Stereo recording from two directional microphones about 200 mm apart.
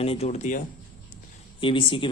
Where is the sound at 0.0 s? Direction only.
30° left (ahead or behind).